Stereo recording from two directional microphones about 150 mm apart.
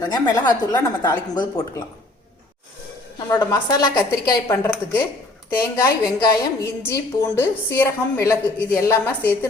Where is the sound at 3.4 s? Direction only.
20° left (ahead or behind).